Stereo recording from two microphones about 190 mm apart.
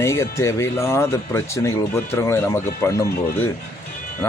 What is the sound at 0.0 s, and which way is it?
Speech, 15° left (ahead or behind).